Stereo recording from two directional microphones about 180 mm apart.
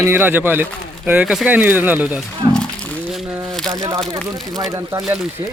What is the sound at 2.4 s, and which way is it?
Wild animals, 25° right (ahead or behind).